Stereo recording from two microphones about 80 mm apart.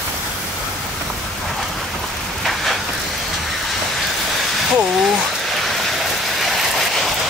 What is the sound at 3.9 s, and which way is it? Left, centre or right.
Rain, centre.